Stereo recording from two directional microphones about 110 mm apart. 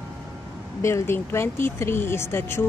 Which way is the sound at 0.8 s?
25° left (ahead or behind).